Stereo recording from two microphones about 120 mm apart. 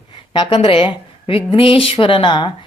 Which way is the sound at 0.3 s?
45° left (ahead or behind).